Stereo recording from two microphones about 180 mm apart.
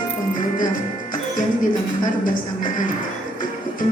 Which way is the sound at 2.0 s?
50° left (ahead or behind).